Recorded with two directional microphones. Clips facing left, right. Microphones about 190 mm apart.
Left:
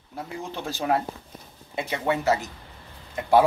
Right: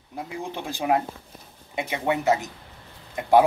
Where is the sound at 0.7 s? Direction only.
15° right (ahead or behind).